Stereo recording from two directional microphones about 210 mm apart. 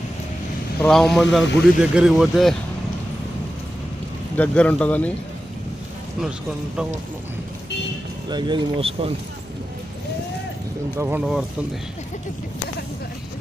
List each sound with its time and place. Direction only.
0.8 s speech: centre (ahead or behind)
4.4 s speech: 5° left (ahead or behind)
8.3 s speech: 20° right (ahead or behind)
10.9 s speech: 10° right (ahead or behind)